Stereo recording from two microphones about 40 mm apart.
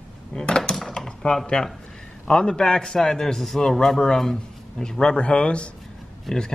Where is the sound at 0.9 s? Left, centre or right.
Centre.